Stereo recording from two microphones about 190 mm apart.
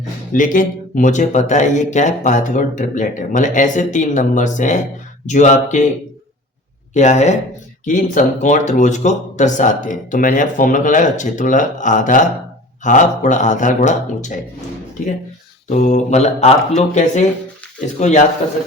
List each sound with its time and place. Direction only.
0.3 s speech: 45° left (ahead or behind)
6.9 s speech: 40° left (ahead or behind)
15.7 s speech: 40° left (ahead or behind)